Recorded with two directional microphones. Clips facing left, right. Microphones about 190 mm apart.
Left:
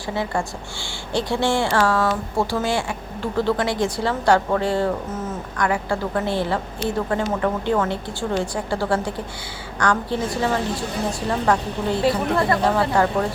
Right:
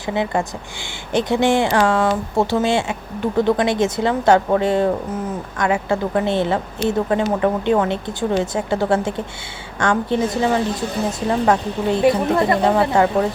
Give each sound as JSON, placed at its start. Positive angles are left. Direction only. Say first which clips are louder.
{"t": 0.1, "sound": "speech", "louder": "right 4 dB", "side_deg": -20}